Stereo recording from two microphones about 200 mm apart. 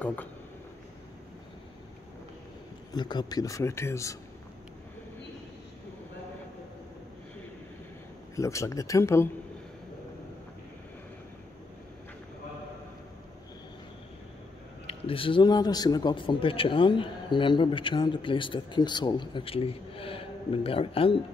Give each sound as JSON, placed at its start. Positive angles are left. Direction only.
{"t": 0.0, "sound": "speech", "side_deg": 10}
{"t": 2.9, "sound": "speech", "side_deg": 20}
{"t": 8.4, "sound": "speech", "side_deg": 15}
{"t": 14.9, "sound": "a man's voice", "side_deg": 25}